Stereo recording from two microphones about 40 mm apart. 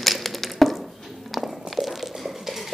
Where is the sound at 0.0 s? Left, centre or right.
Centre.